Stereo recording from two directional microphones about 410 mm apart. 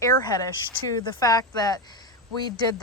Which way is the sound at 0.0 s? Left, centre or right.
Centre.